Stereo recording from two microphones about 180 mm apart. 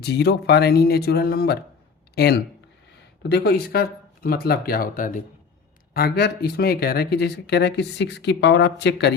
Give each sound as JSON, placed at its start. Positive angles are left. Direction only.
{"t": 0.0, "sound": "speech", "side_deg": 70}
{"t": 5.9, "sound": "speech", "side_deg": 60}